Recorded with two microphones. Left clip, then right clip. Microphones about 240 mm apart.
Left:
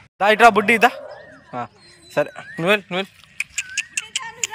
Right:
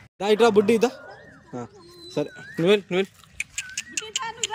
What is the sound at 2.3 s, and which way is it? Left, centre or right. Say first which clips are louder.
Vehicle: left 2 dB; centre.